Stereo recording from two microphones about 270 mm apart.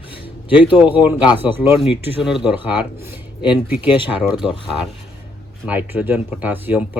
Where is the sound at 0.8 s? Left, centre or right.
Centre.